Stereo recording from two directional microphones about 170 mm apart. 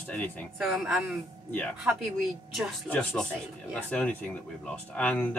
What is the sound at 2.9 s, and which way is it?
Speech, 10° left (ahead or behind).